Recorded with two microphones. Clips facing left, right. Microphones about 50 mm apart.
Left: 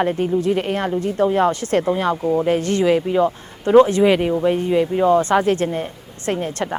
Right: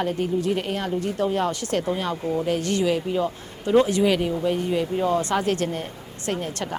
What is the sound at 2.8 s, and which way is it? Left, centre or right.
Speech, left.